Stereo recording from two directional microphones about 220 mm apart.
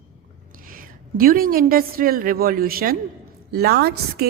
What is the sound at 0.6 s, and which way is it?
A woman's voice, 40° right (ahead or behind).